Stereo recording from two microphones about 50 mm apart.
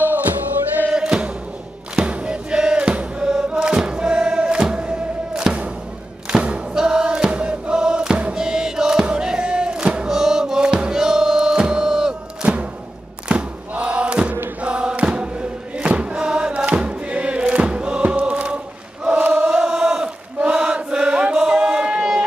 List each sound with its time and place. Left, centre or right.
0.9 s music: centre
3.4 s choir: centre
6.4 s music: centre
13.7 s chant: right
14.6 s choir: centre
15.0 s music: centre
19.1 s chant: right
19.4 s chant: centre